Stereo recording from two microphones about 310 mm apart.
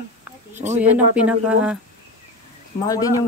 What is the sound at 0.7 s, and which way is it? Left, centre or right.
Speech, centre.